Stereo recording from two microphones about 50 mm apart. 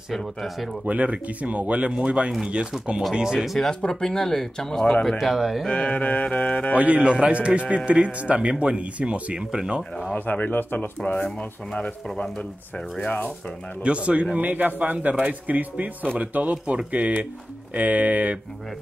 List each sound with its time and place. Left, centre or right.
0.1 s speech: centre
0.8 s speech: right
3.2 s speech: centre
3.5 s speech: centre
5.0 s speech: centre
5.7 s mantra: left
6.7 s speech: right
10.1 s speech: left
11.3 s mantra: centre
13.8 s speech: right
14.5 s a man's voice: right